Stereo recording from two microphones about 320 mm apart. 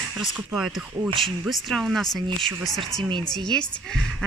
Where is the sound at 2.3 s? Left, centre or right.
Centre.